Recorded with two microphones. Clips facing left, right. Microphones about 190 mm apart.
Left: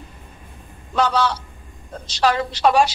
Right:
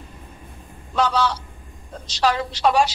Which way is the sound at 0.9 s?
60° left (ahead or behind).